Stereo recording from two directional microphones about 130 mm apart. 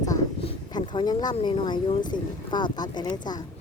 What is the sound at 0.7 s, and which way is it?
Speech, 35° left (ahead or behind).